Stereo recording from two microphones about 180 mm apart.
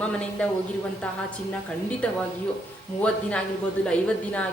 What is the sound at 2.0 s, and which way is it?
Speech, 5° left (ahead or behind).